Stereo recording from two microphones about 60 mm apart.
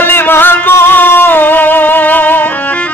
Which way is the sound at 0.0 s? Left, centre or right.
Left.